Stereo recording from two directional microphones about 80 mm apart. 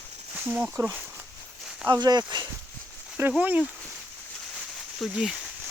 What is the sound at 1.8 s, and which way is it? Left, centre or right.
Speech, right.